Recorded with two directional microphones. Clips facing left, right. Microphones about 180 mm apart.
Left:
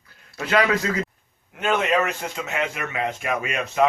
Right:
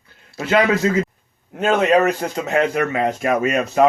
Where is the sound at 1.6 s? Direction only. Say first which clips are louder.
Right 6 dB; 40° right (ahead or behind).